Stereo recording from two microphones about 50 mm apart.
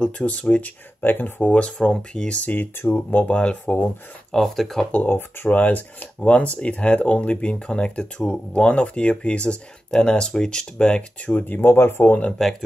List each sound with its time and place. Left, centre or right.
0.0 s speech: left
1.5 s speech: centre
2.9 s speech: left
4.3 s speech: centre
4.9 s speech: left
11.6 s speech: left
12.3 s speech: centre